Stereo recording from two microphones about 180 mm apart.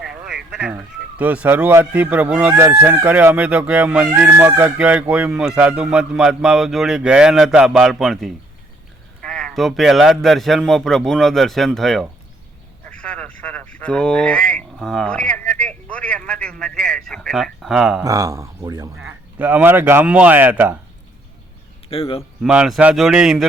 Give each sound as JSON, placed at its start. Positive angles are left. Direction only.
{"t": 0.0, "sound": "a sound", "side_deg": -5}
{"t": 1.2, "sound": "speech", "side_deg": -10}
{"t": 18.0, "sound": "speech", "side_deg": -20}
{"t": 18.9, "sound": "speech", "side_deg": -10}
{"t": 21.8, "sound": "speech", "side_deg": 30}
{"t": 22.4, "sound": "speech", "side_deg": -5}